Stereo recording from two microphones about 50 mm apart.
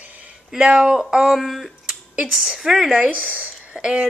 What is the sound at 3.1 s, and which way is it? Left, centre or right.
Speech, right.